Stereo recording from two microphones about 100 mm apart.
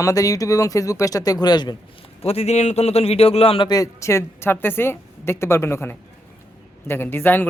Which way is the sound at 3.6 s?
35° left (ahead or behind).